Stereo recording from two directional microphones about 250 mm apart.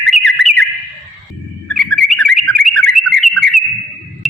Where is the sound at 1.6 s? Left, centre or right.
Centre.